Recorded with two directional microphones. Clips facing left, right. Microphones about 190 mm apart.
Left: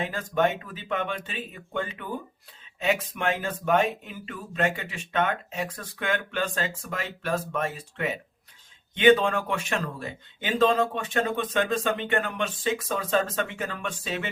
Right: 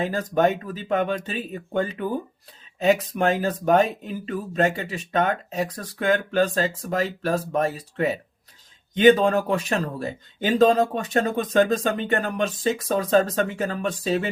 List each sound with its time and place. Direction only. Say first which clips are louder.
0.0 s speech: right 4 dB; 40° right (ahead or behind)